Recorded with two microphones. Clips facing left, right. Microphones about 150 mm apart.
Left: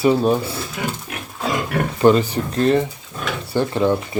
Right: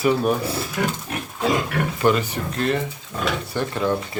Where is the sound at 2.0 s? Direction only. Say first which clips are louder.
Left 6 dB; 30° left (ahead or behind).